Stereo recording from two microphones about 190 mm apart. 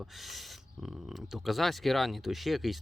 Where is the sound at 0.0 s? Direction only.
Centre (ahead or behind).